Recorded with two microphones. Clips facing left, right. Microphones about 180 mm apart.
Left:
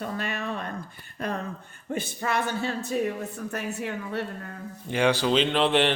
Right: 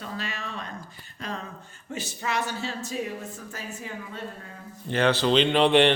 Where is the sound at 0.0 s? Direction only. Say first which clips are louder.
Left 4 dB; 55° left (ahead or behind).